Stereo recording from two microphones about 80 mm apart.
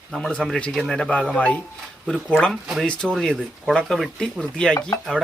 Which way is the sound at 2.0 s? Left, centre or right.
Centre.